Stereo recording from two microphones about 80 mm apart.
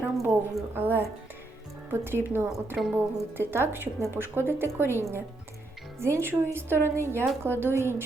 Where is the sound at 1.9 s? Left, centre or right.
Right.